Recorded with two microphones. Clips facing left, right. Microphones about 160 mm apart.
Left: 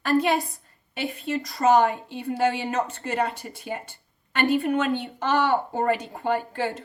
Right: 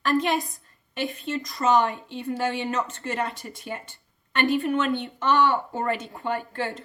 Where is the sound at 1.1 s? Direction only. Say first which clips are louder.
Left 2 dB; 40° left (ahead or behind).